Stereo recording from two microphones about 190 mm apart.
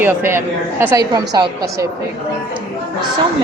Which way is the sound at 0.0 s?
10° right (ahead or behind).